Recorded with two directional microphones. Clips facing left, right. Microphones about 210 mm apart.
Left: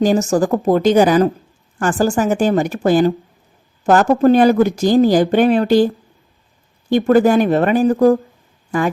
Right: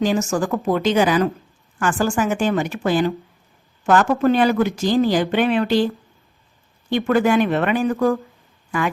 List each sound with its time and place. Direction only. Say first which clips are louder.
0.0 s speech: left 5 dB; 40° left (ahead or behind)